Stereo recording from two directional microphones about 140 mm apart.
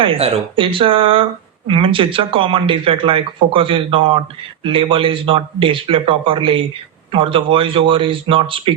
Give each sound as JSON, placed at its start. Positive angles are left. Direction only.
{"t": 0.0, "sound": "speech", "side_deg": -40}